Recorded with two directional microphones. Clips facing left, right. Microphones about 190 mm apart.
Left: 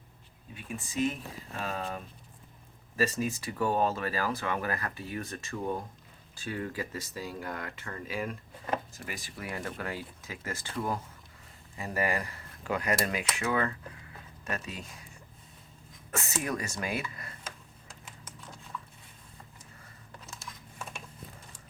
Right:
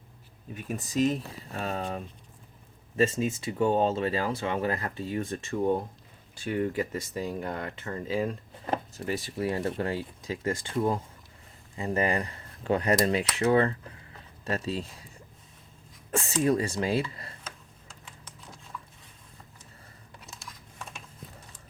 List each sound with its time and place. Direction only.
0.5 s speech: 40° right (ahead or behind)
16.1 s speech: 30° right (ahead or behind)